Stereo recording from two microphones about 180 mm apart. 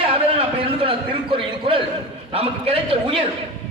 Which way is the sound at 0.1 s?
30° right (ahead or behind).